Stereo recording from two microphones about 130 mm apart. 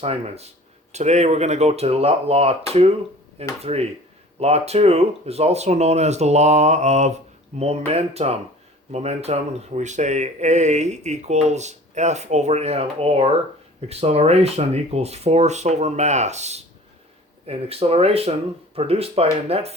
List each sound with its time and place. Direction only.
0.0 s speech: 50° right (ahead or behind)
3.6 s speech: 50° right (ahead or behind)